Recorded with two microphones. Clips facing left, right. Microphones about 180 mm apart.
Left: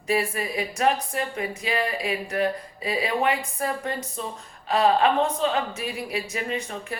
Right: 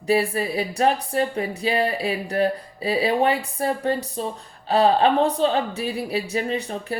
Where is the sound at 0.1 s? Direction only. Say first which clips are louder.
Right 4 dB; 35° right (ahead or behind).